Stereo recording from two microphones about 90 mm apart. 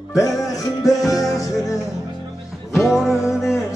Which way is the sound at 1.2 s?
40° left (ahead or behind).